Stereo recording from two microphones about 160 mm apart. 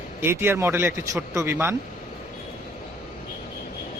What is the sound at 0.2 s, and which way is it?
A man's voice, 15° right (ahead or behind).